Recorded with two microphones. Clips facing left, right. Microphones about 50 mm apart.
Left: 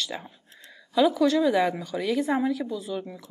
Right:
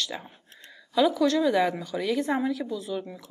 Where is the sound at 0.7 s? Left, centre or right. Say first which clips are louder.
Left 1 dB; centre.